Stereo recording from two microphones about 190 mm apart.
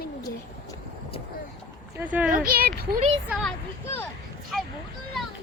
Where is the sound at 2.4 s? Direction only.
50° right (ahead or behind).